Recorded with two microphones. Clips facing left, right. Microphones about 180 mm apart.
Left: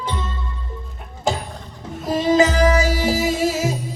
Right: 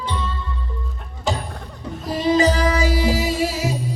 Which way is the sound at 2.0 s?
45° left (ahead or behind).